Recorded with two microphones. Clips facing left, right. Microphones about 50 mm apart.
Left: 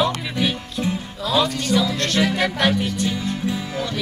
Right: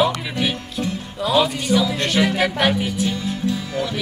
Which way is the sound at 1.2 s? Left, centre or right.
Centre.